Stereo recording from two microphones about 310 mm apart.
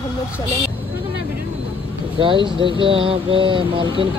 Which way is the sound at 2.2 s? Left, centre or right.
Centre.